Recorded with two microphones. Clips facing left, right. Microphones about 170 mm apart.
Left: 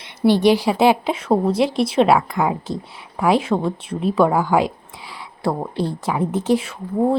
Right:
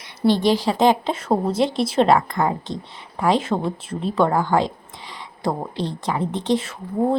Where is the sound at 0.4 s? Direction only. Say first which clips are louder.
Left 3 dB; 10° left (ahead or behind).